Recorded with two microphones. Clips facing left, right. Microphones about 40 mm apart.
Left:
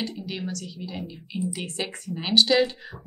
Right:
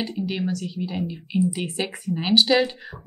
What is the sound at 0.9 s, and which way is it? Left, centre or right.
A woman's voice, centre.